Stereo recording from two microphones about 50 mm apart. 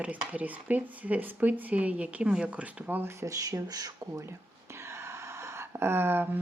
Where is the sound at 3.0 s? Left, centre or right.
Right.